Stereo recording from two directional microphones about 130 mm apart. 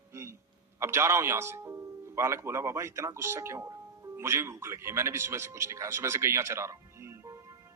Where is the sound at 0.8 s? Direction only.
20° right (ahead or behind).